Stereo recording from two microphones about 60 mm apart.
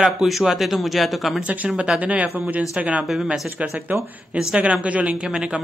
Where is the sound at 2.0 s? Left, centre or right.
Right.